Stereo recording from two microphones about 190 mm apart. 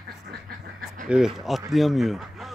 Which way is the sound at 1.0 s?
5° right (ahead or behind).